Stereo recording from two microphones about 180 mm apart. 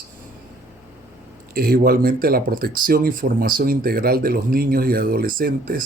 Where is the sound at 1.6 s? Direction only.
55° right (ahead or behind).